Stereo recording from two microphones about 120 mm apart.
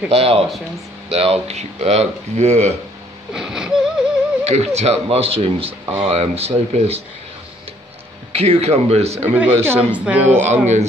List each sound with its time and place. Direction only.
0.1 s speech: 55° right (ahead or behind)
3.3 s wheeze: 5° right (ahead or behind)
4.5 s speech: 65° right (ahead or behind)
8.3 s speech: 55° right (ahead or behind)
9.3 s speech: 20° right (ahead or behind)
10.5 s speech: 75° right (ahead or behind)